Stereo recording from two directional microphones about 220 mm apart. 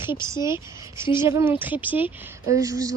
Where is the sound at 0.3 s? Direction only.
15° right (ahead or behind).